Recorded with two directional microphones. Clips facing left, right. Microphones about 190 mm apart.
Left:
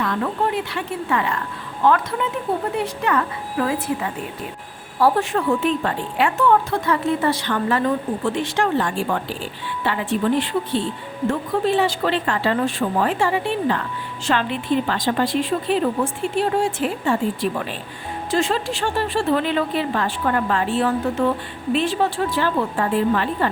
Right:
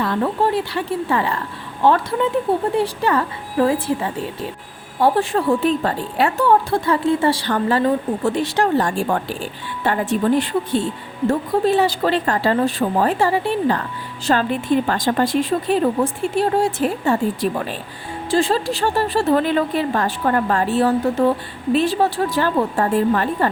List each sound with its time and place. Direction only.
0.0 s a woman's voice: 30° right (ahead or behind)